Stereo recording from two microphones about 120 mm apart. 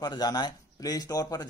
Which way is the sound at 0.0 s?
35° left (ahead or behind).